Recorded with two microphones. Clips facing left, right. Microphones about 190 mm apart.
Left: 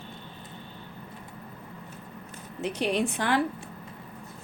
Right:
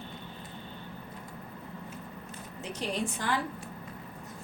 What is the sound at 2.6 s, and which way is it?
Speech, 70° left (ahead or behind).